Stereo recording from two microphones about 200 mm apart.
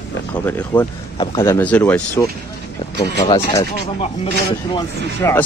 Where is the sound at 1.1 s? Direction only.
25° left (ahead or behind).